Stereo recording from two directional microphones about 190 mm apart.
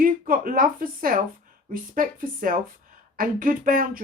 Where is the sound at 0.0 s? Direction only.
45° right (ahead or behind).